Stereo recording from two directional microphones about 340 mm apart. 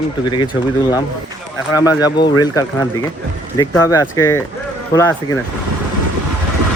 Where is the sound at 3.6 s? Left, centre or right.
Centre.